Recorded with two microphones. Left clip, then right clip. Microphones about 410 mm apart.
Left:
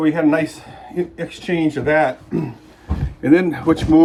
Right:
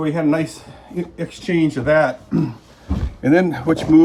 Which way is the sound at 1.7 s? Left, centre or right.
Centre.